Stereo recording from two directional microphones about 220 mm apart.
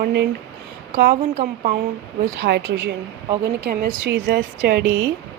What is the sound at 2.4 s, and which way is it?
Speech, 50° right (ahead or behind).